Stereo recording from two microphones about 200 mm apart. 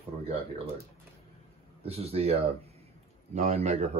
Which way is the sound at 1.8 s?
30° right (ahead or behind).